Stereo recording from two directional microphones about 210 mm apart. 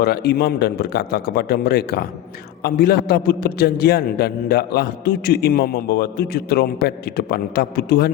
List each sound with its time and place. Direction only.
0.0 s a man's voice: 50° left (ahead or behind)